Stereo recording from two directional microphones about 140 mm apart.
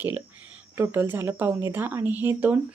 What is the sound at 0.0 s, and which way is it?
Speech, 10° right (ahead or behind).